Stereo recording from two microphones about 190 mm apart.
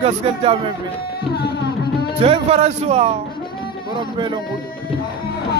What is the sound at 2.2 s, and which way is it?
Speech, 30° right (ahead or behind).